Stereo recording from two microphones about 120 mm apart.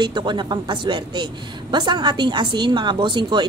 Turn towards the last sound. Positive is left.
turn(degrees=-40)  # may be behind; listen again after turning